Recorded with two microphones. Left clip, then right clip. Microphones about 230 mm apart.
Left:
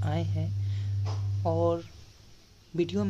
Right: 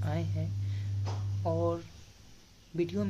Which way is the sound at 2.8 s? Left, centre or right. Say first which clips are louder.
Left 3 dB; centre.